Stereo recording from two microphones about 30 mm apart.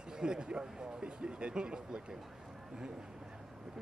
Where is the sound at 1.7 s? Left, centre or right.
Right.